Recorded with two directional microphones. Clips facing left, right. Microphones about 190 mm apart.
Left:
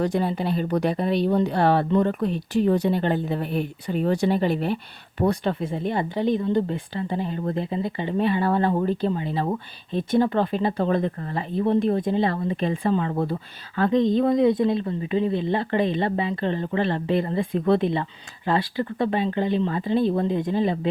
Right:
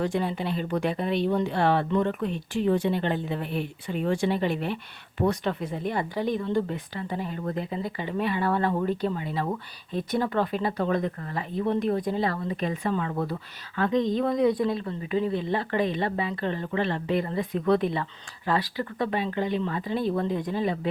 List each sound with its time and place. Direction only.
0.0 s speech: 40° left (ahead or behind)